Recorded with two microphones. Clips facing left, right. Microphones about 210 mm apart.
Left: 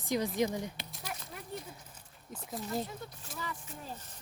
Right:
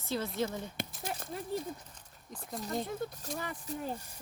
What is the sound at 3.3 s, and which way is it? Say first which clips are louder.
Speech: right 2 dB; 5° left (ahead or behind).